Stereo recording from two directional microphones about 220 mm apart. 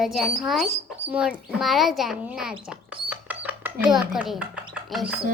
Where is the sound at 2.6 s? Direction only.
5° right (ahead or behind).